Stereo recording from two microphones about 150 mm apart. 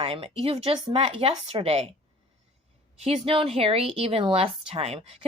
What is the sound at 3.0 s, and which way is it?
A woman's voice, 35° right (ahead or behind).